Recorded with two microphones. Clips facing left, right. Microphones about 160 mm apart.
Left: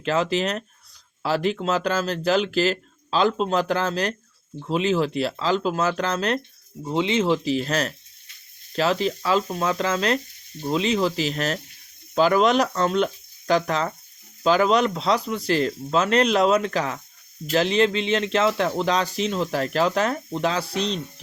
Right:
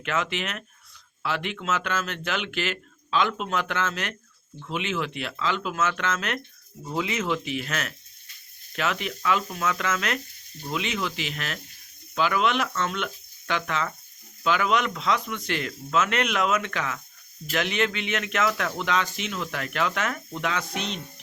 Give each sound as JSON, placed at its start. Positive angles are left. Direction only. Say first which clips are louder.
{"t": 0.0, "sound": "speech", "louder": "left 6 dB", "side_deg": 35}